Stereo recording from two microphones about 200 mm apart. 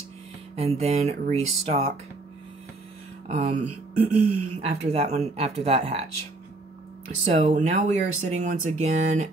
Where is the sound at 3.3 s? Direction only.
35° right (ahead or behind).